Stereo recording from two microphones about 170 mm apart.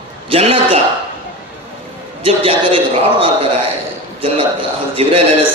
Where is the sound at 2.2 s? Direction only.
35° right (ahead or behind).